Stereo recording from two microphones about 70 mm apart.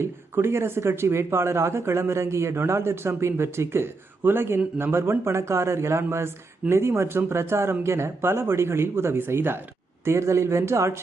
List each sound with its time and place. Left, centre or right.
0.0 s speech: right